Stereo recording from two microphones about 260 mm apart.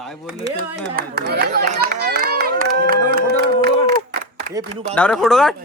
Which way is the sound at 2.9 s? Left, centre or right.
Right.